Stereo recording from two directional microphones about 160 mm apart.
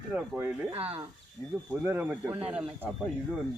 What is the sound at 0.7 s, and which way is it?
Speech, 40° right (ahead or behind).